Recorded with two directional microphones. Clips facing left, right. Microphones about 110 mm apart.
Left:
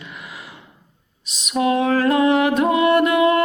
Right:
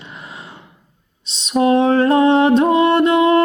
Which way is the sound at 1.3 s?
30° right (ahead or behind).